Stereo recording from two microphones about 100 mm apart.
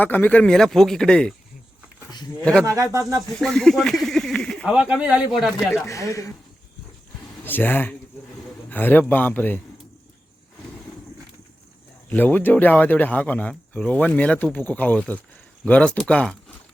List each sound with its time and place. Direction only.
0.0 s a man's voice: 15° left (ahead or behind)
2.4 s a man's voice: 10° left (ahead or behind)
2.6 s speech: 30° right (ahead or behind)
3.3 s speech: 5° left (ahead or behind)
4.6 s speech: 10° right (ahead or behind)
5.5 s speech: centre (ahead or behind)
5.8 s speech: 30° left (ahead or behind)
7.4 s a man's voice: 20° left (ahead or behind)
12.0 s a man's voice: 20° left (ahead or behind)